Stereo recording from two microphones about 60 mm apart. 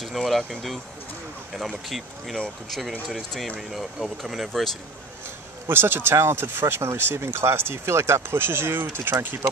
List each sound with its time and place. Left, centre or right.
0.0 s speech: centre
5.7 s speech: right